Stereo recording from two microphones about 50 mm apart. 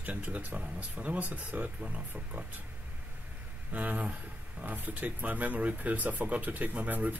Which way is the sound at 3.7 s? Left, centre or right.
Right.